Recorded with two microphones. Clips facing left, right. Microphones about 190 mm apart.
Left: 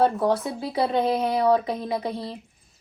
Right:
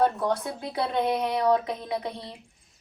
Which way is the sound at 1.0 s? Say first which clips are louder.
Left 3 dB; 30° left (ahead or behind).